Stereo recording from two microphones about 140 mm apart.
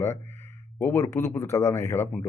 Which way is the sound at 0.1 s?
55° right (ahead or behind).